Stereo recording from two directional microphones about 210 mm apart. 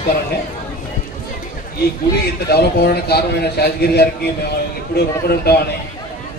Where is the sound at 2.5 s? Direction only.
50° left (ahead or behind).